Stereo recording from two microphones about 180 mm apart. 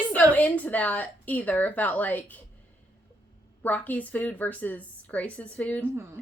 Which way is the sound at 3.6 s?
10° left (ahead or behind).